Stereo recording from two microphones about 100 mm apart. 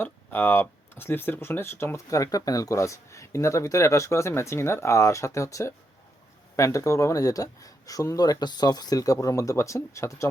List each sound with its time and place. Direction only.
0.0 s speech: 20° left (ahead or behind)